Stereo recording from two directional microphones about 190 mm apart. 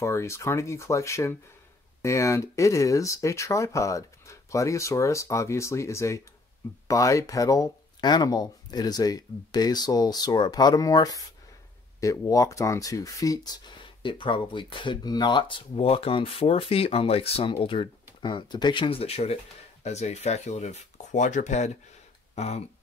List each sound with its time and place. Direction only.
0.0 s speech: 15° left (ahead or behind); by 22.6 s 35° left (ahead or behind)